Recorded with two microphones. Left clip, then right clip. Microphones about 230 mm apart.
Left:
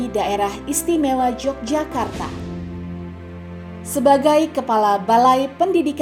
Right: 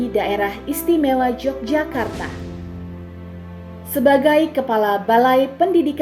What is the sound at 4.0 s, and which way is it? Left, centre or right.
A woman's voice, left.